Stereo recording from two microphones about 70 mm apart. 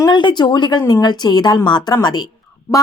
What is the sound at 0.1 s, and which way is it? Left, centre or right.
A woman's voice, left.